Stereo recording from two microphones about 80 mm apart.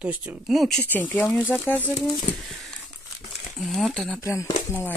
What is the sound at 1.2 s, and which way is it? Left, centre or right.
Speech, left.